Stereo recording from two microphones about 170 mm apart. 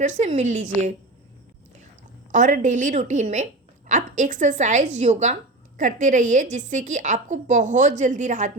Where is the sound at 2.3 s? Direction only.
50° right (ahead or behind).